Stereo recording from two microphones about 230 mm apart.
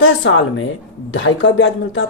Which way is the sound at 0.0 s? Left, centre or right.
Left.